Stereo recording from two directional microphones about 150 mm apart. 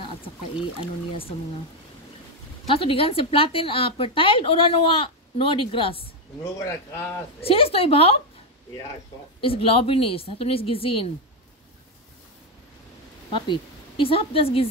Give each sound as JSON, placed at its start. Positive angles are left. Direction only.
{"t": 2.7, "sound": "speech", "side_deg": 35}
{"t": 6.4, "sound": "a man's voice", "side_deg": 20}
{"t": 7.3, "sound": "speech", "side_deg": 40}
{"t": 9.4, "sound": "speech", "side_deg": 40}
{"t": 13.5, "sound": "speech", "side_deg": 35}